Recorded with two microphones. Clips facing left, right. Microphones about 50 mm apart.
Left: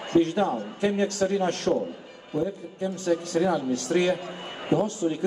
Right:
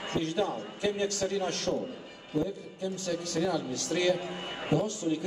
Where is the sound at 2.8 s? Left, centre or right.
Left.